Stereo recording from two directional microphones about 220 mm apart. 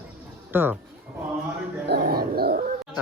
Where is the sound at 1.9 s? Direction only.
45° right (ahead or behind).